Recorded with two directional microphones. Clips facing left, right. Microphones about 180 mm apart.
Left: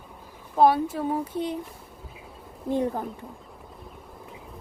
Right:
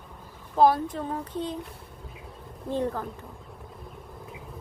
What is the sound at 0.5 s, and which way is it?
Speech, centre (ahead or behind).